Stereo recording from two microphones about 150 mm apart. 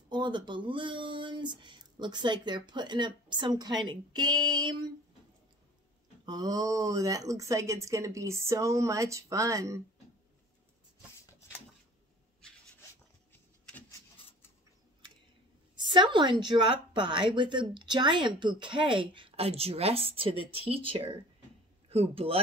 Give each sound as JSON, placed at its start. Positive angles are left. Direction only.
{"t": 0.1, "sound": "speech", "side_deg": -30}
{"t": 6.2, "sound": "speech", "side_deg": -25}
{"t": 13.3, "sound": "a sound", "side_deg": 10}
{"t": 15.7, "sound": "a man's voice", "side_deg": -30}